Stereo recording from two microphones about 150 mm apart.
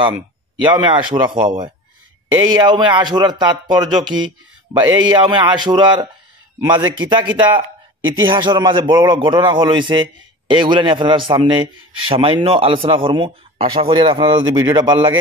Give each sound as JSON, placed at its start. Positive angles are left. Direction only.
{"t": 0.6, "sound": "a man's voice", "side_deg": -30}